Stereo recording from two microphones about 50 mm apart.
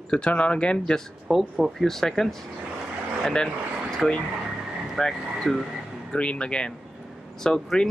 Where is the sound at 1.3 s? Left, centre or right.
Centre.